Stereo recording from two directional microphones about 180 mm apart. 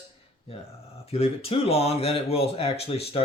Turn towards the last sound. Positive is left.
turn(degrees=35)  # may be behind; listen again after turning